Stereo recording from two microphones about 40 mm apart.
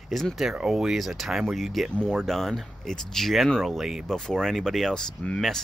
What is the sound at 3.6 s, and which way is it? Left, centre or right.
Speech, centre.